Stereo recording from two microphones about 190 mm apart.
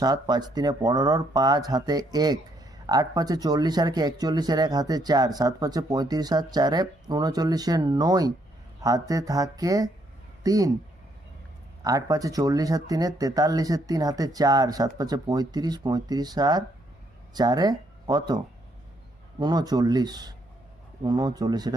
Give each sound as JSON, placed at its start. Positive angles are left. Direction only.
{"t": 0.0, "sound": "speech", "side_deg": -20}
{"t": 11.8, "sound": "speech", "side_deg": -20}
{"t": 19.4, "sound": "speech", "side_deg": -20}